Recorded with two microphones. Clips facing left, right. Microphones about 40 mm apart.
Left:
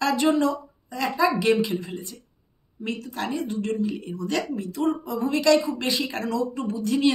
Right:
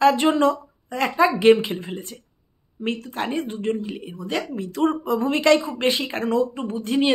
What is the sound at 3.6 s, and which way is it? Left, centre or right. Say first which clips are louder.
Speech: even; right.